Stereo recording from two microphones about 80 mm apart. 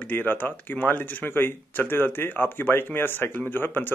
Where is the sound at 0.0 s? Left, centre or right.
Left.